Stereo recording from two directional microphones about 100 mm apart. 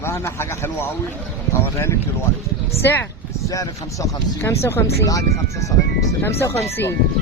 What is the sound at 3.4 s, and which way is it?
Speech, 35° left (ahead or behind).